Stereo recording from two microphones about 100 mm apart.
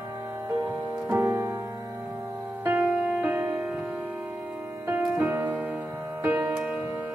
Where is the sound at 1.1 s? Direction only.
25° right (ahead or behind).